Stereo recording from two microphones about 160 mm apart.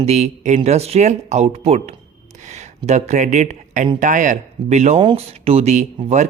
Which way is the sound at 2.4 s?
45° right (ahead or behind).